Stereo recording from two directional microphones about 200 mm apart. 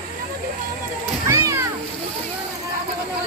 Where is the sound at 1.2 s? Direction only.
15° right (ahead or behind).